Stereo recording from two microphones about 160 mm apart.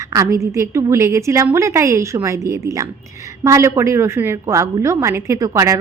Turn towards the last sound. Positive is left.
turn(degrees=-20)  # may be behind; listen again after turning